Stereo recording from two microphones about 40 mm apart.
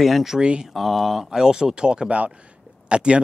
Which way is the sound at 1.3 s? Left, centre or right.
Centre.